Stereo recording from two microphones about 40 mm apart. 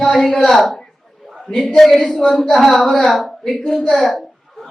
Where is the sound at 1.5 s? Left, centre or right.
Centre.